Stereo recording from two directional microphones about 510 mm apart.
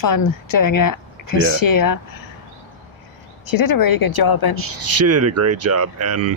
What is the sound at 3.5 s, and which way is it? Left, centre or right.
A woman's voice, left.